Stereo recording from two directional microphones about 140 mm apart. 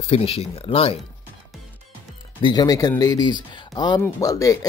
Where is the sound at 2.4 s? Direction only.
30° left (ahead or behind).